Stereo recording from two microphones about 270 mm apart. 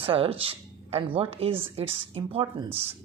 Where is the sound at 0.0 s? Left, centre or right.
Centre.